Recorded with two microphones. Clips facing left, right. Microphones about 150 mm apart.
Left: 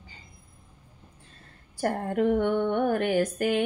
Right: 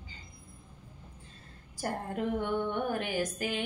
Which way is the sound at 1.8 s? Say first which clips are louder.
Left 8 dB; 60° left (ahead or behind).